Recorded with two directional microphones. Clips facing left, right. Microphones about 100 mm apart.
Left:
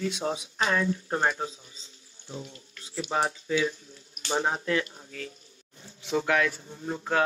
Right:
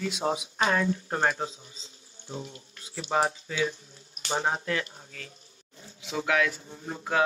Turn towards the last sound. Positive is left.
turn(degrees=0)  # may be behind; listen again after turning